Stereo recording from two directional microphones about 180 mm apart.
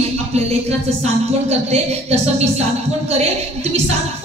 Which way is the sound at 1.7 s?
35° right (ahead or behind).